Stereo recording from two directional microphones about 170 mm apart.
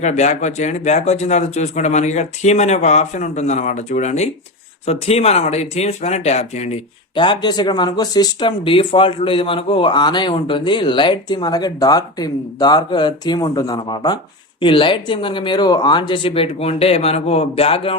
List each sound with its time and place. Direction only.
0.0 s speech: 45° left (ahead or behind)
7.2 s speech: 25° left (ahead or behind)